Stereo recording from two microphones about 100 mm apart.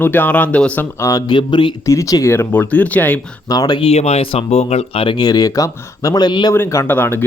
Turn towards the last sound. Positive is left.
turn(degrees=20)  # may be behind; listen again after turning